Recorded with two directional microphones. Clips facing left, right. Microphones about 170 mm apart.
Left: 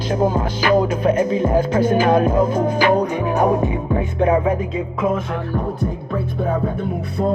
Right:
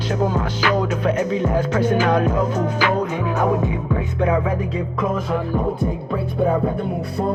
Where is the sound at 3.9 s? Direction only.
30° left (ahead or behind).